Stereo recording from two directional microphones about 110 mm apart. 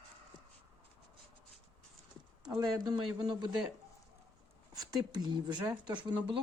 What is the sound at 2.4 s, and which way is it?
Speech, 40° right (ahead or behind).